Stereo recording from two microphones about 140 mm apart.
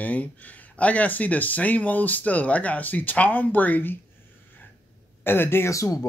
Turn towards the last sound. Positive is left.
turn(degrees=20)  # may be behind; listen again after turning